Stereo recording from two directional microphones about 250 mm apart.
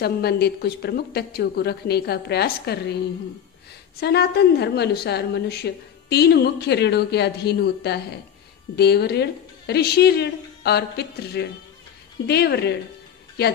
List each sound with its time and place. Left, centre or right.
0.0 s a woman's voice: left
4.0 s a woman's voice: left